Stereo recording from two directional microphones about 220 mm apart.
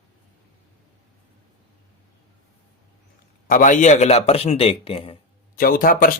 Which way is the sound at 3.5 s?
35° left (ahead or behind).